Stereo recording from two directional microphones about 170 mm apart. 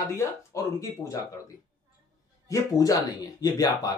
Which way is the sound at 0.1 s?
20° left (ahead or behind).